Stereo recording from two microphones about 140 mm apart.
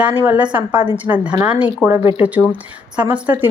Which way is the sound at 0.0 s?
10° right (ahead or behind).